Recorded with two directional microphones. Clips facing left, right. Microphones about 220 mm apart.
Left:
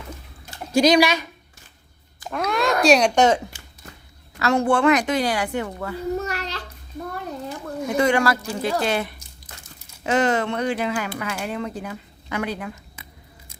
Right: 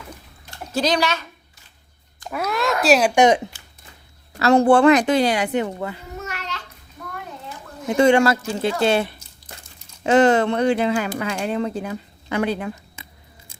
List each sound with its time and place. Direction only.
0.5 s speech: 10° left (ahead or behind)
2.3 s speech: 5° right (ahead or behind)
4.4 s a woman's voice: 35° right (ahead or behind)
6.1 s a sound: 35° left (ahead or behind)
7.9 s a woman's voice: 25° right (ahead or behind)